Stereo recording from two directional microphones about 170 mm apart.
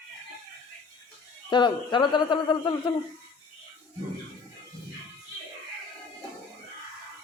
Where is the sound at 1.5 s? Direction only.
25° left (ahead or behind).